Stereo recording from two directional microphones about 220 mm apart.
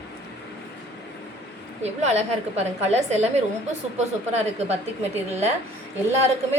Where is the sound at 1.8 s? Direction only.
30° right (ahead or behind).